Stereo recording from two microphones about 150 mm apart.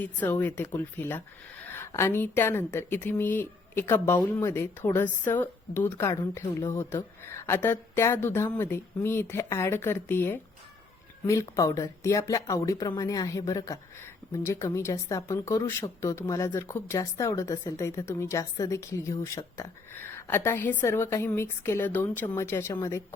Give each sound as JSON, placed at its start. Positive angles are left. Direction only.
{"t": 0.0, "sound": "a woman's voice", "side_deg": 10}